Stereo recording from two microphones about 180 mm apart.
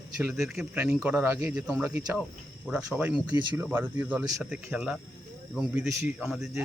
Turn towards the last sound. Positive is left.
turn(degrees=-5)  # may be behind; listen again after turning